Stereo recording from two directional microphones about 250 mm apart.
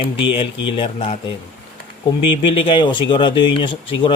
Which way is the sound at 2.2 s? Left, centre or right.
Left.